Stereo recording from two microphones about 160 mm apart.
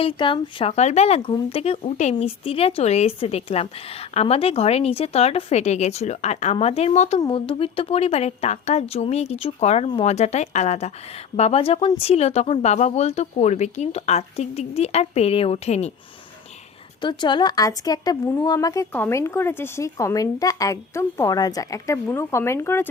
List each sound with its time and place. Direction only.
0.0 s speech: 35° left (ahead or behind)
17.0 s speech: 30° left (ahead or behind)